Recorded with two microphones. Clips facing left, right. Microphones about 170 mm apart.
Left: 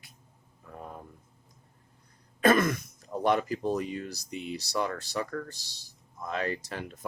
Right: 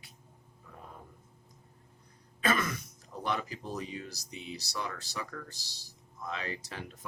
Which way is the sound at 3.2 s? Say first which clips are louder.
Left 9 dB; 50° left (ahead or behind).